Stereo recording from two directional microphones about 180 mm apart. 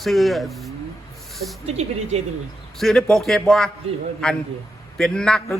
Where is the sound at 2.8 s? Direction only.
Centre (ahead or behind).